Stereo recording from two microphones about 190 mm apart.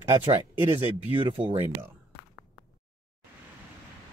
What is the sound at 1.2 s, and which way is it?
Speech, 25° right (ahead or behind).